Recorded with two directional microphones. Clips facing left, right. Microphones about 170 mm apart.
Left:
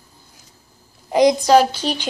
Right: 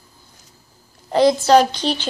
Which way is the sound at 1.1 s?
15° left (ahead or behind).